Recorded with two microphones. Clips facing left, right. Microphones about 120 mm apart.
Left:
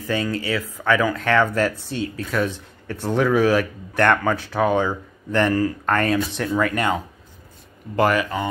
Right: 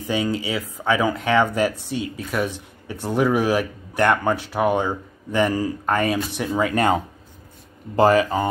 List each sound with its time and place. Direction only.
0.0 s speech: 15° right (ahead or behind)
6.5 s speech: 30° right (ahead or behind)